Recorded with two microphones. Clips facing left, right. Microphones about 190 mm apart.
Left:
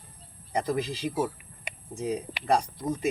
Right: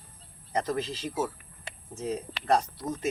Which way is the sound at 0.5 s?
15° left (ahead or behind).